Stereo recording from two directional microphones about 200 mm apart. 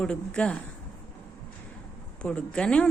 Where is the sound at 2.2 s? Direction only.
5° left (ahead or behind).